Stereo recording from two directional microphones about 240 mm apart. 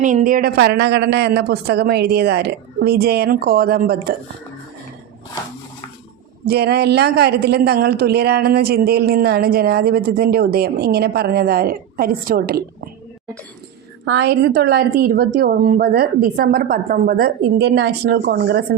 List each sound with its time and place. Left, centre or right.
0.0 s speech: right
6.4 s speech: right
14.0 s speech: right